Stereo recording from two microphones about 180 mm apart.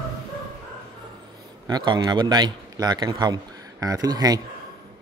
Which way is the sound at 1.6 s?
25° right (ahead or behind).